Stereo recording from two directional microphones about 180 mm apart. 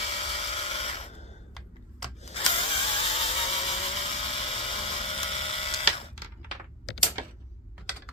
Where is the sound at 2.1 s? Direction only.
35° left (ahead or behind).